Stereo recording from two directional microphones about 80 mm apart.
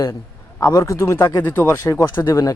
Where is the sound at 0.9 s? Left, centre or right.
Left.